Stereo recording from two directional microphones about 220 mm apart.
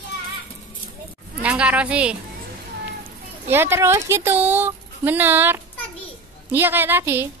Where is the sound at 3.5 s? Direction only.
10° right (ahead or behind).